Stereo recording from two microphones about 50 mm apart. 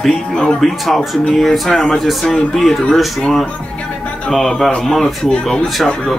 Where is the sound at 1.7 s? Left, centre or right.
Centre.